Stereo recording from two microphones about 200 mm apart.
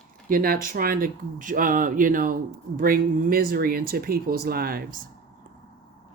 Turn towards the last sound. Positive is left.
turn(degrees=-45)  # may be behind; listen again after turning